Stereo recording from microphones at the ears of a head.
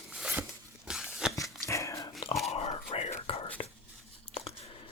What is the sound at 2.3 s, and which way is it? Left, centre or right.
Dog, left.